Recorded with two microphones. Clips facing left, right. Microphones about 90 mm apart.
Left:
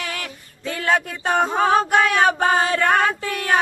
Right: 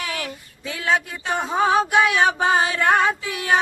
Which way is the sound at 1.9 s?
50° left (ahead or behind).